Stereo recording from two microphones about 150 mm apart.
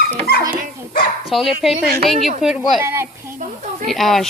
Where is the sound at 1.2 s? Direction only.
Centre (ahead or behind).